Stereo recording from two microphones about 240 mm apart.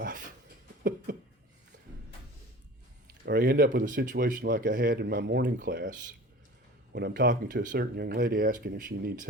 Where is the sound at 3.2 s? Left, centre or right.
Right.